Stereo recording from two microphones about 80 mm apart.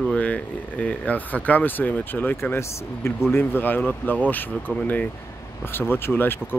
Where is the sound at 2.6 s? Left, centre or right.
Left.